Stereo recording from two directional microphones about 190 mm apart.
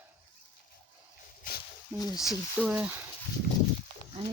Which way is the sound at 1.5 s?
50° left (ahead or behind).